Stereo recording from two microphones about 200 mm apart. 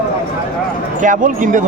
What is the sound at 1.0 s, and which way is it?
Speech, 40° right (ahead or behind).